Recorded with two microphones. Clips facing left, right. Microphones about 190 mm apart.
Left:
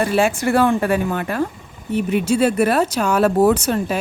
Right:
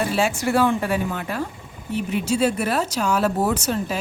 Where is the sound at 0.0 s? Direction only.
55° left (ahead or behind).